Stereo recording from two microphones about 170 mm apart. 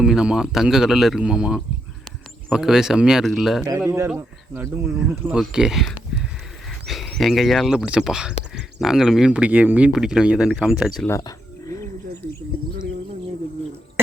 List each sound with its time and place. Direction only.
0.0 s speech: 5° right (ahead or behind)
3.7 s speech: 15° right (ahead or behind); by 11.1 s centre (ahead or behind)
11.1 s wild animals: 20° left (ahead or behind)